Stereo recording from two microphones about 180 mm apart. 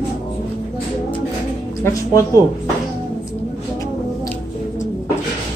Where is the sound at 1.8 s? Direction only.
15° left (ahead or behind).